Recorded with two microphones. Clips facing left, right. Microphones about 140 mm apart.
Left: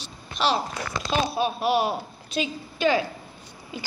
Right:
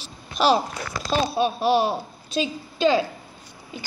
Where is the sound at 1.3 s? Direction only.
25° right (ahead or behind).